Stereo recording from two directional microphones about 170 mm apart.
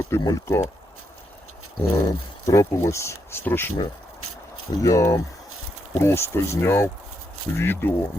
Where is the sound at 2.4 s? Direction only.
20° left (ahead or behind).